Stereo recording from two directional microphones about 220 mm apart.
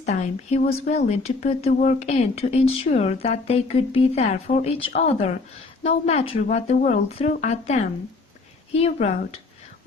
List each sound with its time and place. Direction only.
0.0 s speech: 30° left (ahead or behind)